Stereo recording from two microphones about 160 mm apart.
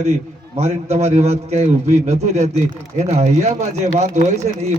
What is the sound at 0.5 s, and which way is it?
Speech, 40° right (ahead or behind).